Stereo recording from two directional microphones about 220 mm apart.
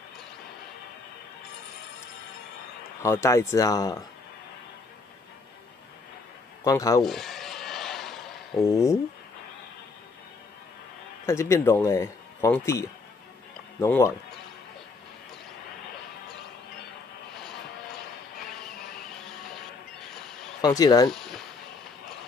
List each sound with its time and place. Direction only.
3.0 s speech: 10° left (ahead or behind)
6.6 s speech: 15° left (ahead or behind)
7.0 s a sound: centre (ahead or behind)
8.6 s speech: 15° left (ahead or behind)
11.2 s speech: 10° left (ahead or behind)
20.6 s speech: 15° left (ahead or behind)
21.1 s speech: centre (ahead or behind)